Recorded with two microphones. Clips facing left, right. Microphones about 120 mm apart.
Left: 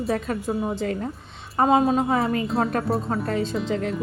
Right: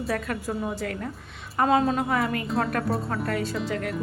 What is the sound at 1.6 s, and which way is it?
Speech, 20° left (ahead or behind).